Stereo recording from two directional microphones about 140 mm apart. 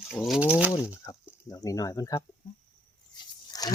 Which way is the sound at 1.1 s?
25° left (ahead or behind).